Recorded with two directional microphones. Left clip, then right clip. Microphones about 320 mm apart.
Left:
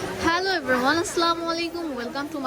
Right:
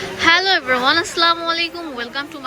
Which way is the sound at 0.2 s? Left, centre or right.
Centre.